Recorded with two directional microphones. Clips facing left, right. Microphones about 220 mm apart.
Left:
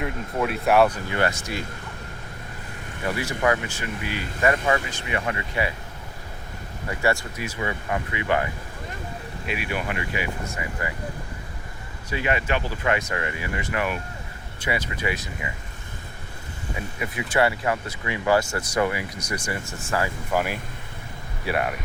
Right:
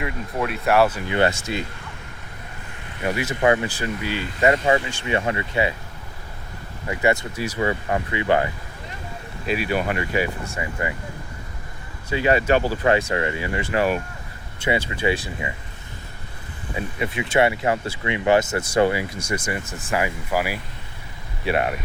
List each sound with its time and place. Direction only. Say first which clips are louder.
0.0 s speech: even; centre (ahead or behind)
1.0 s speech: right 4 dB; 25° right (ahead or behind)
3.0 s speech: right 3 dB; 20° right (ahead or behind)
3.7 s speech: right 4 dB; 30° right (ahead or behind)
7.0 s speech: right 3 dB; 20° right (ahead or behind)
7.4 s speech: right 6 dB; 35° right (ahead or behind)
9.5 s speech: right 6 dB; 35° right (ahead or behind)
10.6 s speech: right 8 dB; 20° right (ahead or behind)
12.1 s speech: right 6 dB; 35° right (ahead or behind)
16.7 s speech: right 5 dB; 25° right (ahead or behind); by 20.6 s 5° right (ahead or behind)
21.4 s speech: right 3 dB; 25° right (ahead or behind)